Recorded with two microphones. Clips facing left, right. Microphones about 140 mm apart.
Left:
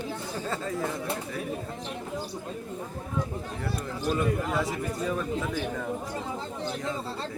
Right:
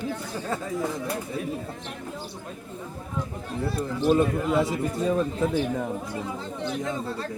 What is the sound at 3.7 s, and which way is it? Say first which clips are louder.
Speech: right 8 dB; 30° right (ahead or behind).